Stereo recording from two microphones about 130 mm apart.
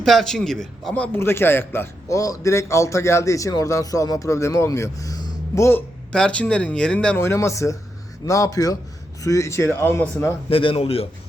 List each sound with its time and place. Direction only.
0.0 s a man's voice: centre (ahead or behind); by 5.8 s 20° left (ahead or behind)
6.1 s a man's voice: 10° left (ahead or behind)
10.5 s a man's voice: 45° left (ahead or behind)